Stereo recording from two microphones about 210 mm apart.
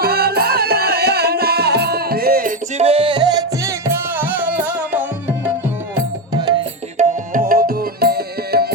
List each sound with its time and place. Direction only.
0.0 s music: 45° right (ahead or behind)
2.8 s music: 25° right (ahead or behind); by 5.0 s 5° right (ahead or behind)
6.9 s tabla: 40° right (ahead or behind)